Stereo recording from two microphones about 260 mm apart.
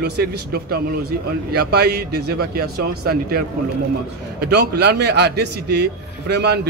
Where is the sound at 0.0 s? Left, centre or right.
Right.